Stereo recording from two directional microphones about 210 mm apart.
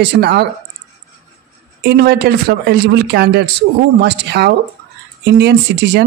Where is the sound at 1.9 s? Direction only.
50° right (ahead or behind).